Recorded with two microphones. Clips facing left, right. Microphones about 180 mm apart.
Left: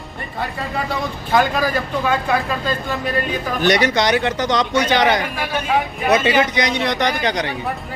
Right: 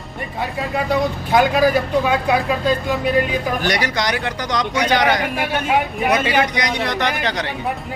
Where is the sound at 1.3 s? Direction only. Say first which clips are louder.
Right 3 dB; 15° right (ahead or behind).